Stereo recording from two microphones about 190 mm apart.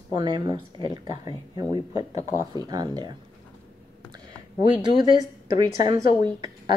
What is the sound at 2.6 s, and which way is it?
Speech, 20° right (ahead or behind).